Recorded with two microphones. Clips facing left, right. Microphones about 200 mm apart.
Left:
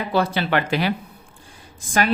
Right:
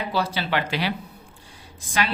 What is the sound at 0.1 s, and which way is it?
Speech, 55° left (ahead or behind).